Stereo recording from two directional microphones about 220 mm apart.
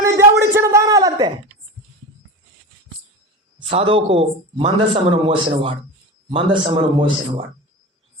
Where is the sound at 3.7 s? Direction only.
25° right (ahead or behind).